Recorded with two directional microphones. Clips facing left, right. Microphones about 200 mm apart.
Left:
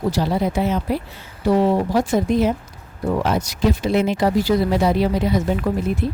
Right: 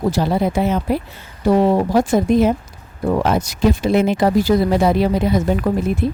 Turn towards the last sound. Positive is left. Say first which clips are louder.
# right 3 dB
turn(degrees=-55)  # may be behind; listen again after turning